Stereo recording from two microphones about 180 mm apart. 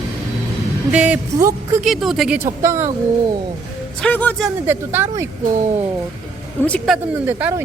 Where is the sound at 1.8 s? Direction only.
Centre (ahead or behind).